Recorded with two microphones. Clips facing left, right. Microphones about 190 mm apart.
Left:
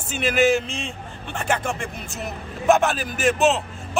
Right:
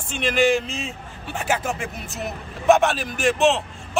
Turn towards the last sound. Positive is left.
turn(degrees=0)  # may be behind; listen again after turning